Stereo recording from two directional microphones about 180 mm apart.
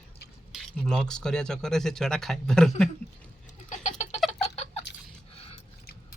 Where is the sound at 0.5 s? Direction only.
Centre (ahead or behind).